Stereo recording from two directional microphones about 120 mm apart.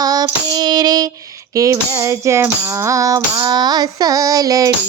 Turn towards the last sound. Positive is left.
turn(degrees=-30)  # may be behind; listen again after turning